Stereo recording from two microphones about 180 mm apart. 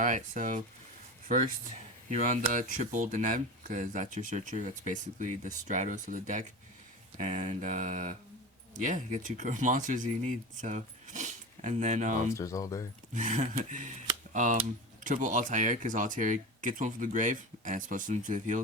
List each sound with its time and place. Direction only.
0.0 s speech: 45° right (ahead or behind)
2.0 s speech: 40° right (ahead or behind)
12.3 s speech: 15° left (ahead or behind)
13.1 s speech: 45° right (ahead or behind)